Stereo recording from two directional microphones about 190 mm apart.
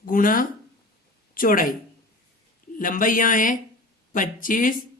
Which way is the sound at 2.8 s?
45° left (ahead or behind).